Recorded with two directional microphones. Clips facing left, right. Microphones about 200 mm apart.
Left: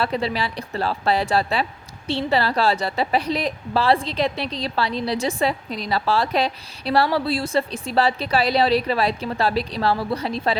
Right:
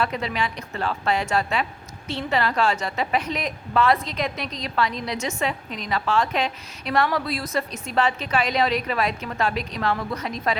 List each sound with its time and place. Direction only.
0.0 s a woman's voice: 30° left (ahead or behind)